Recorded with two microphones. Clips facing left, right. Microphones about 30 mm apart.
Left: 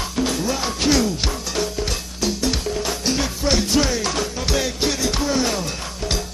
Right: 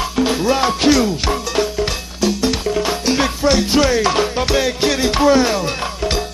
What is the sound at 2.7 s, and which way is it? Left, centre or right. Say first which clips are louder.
Music: right 6 dB; right.